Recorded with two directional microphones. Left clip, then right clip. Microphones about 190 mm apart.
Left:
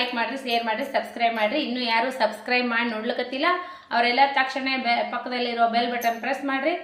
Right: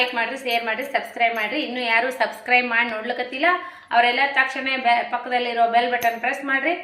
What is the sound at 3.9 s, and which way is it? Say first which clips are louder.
A woman's voice: right 2 dB; 15° left (ahead or behind).